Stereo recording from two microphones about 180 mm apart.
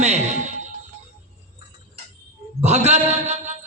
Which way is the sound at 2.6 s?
35° right (ahead or behind).